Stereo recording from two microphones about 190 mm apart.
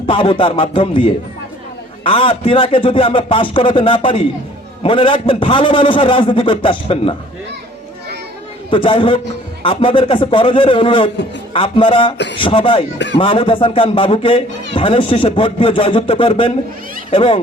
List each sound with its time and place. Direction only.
0.1 s speech: 25° left (ahead or behind)
8.7 s speech: 25° left (ahead or behind)